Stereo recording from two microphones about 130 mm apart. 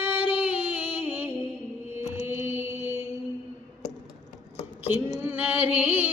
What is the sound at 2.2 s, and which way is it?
Mantra, 20° right (ahead or behind).